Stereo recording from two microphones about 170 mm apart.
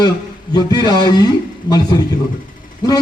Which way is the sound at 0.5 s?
25° left (ahead or behind).